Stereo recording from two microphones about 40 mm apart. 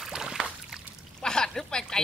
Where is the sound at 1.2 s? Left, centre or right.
Centre.